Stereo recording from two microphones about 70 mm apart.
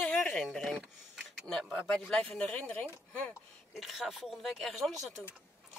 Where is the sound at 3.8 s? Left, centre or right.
Centre.